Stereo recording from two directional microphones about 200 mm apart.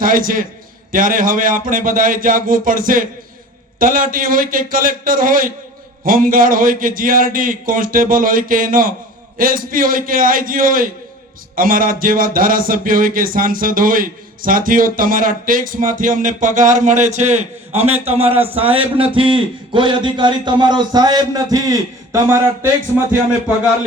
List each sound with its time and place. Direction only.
0.0 s a man's voice: 45° right (ahead or behind); by 22.4 s 15° right (ahead or behind)